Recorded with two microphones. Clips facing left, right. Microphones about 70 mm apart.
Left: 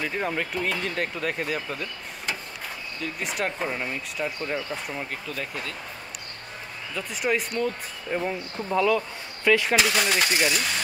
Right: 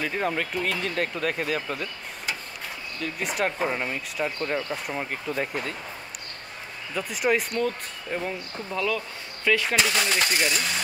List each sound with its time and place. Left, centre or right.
0.0 s speech: centre
5.3 s speech: right
7.0 s speech: centre
7.5 s speech: centre